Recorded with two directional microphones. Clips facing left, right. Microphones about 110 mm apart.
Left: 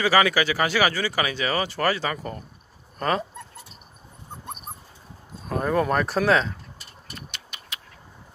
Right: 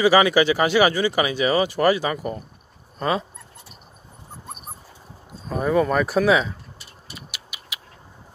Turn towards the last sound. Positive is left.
turn(degrees=-5)  # may be behind; listen again after turning